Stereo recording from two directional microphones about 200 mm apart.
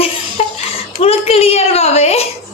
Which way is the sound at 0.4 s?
35° left (ahead or behind).